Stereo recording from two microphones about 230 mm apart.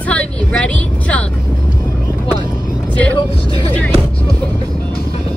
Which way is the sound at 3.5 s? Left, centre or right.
Left.